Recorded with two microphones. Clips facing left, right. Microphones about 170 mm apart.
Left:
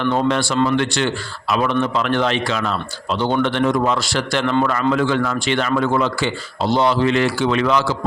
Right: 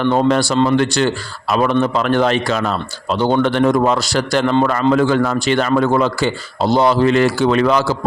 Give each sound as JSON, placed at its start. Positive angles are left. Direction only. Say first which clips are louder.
{"t": 0.1, "sound": "a man's voice", "louder": "right 4 dB", "side_deg": -40}